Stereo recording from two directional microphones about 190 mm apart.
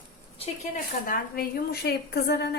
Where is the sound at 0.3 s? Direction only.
30° left (ahead or behind).